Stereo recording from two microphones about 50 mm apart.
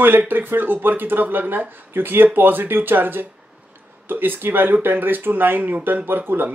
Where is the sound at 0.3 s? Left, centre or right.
Right.